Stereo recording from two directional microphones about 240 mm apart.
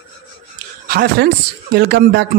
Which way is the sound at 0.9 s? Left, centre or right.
Right.